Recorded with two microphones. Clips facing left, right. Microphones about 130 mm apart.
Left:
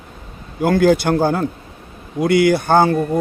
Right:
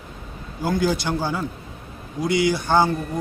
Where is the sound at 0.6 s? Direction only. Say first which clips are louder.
Left 8 dB; 60° left (ahead or behind).